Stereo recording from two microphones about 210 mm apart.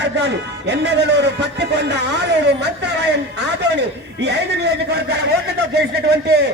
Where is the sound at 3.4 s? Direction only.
55° right (ahead or behind).